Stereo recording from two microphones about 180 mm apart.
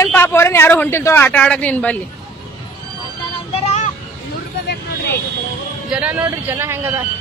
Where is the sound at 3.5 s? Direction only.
35° left (ahead or behind).